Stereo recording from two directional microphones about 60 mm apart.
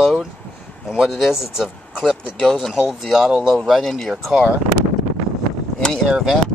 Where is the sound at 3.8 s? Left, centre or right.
Centre.